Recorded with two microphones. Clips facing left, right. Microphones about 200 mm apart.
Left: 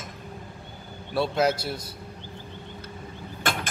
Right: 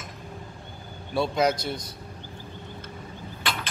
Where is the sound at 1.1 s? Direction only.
5° left (ahead or behind).